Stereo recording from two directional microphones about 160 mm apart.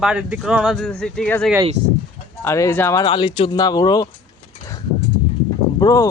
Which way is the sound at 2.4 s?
15° left (ahead or behind).